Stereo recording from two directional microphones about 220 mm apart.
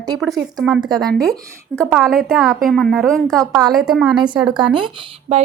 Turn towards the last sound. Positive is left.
turn(degrees=-25)  # may be behind; listen again after turning